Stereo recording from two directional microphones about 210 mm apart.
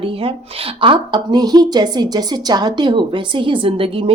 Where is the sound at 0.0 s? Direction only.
25° right (ahead or behind).